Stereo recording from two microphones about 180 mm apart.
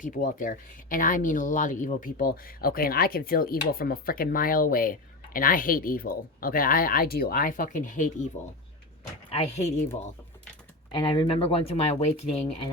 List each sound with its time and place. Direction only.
0.0 s speech: 50° left (ahead or behind)
9.3 s speech: 35° left (ahead or behind)
10.9 s speech: 25° left (ahead or behind)